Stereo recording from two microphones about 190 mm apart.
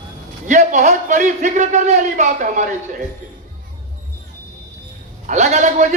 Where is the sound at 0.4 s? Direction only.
40° right (ahead or behind).